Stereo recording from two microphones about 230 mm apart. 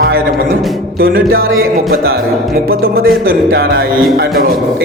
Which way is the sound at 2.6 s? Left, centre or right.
Right.